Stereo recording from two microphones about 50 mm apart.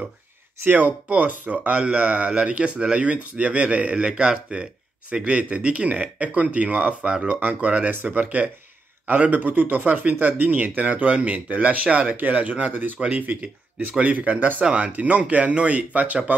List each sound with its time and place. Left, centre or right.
0.7 s speech: right